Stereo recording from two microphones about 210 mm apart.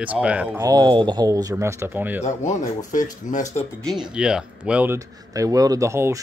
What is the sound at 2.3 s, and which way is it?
Speech, 35° left (ahead or behind).